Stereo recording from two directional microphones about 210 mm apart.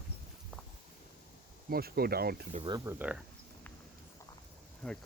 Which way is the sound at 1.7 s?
45° right (ahead or behind).